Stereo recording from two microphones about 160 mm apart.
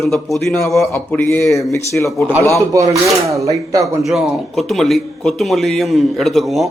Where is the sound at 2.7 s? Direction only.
20° right (ahead or behind).